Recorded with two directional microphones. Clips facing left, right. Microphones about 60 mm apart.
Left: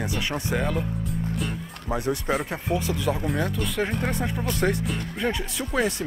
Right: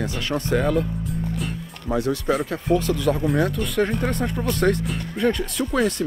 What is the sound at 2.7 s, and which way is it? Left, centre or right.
Speech, centre.